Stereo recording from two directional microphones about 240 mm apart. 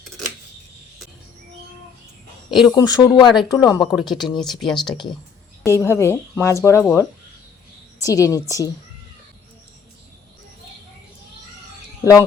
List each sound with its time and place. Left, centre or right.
2.5 s speech: centre
2.7 s speech: centre
3.9 s speech: centre